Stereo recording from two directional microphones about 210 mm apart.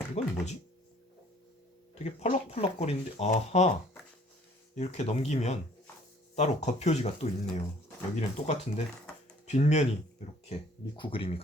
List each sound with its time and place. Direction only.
0.2 s speech: 30° left (ahead or behind)
2.0 s speech: 30° left (ahead or behind)
4.7 s speech: 35° left (ahead or behind)